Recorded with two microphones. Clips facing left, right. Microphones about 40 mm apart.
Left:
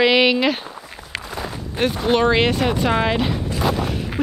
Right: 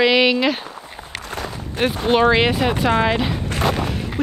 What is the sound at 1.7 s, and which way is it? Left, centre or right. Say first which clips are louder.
Speech: right 1 dB; centre.